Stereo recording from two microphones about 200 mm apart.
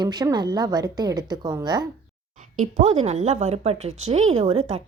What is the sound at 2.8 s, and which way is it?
Speech, 30° right (ahead or behind).